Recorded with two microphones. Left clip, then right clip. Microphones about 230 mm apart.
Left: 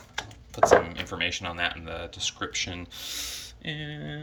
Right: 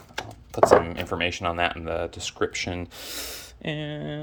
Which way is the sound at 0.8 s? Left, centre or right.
Right.